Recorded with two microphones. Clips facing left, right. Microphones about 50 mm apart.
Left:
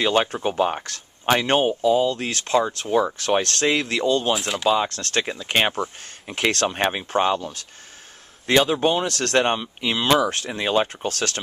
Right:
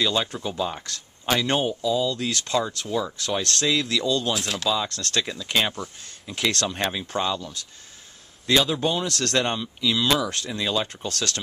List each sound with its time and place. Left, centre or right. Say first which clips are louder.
0.0 s speech: left 4 dB; left
4.3 s speech: left 4 dB; centre
4.6 s speech: left 6 dB; left
8.6 s speech: left 4 dB; left
9.8 s speech: left 2 dB; left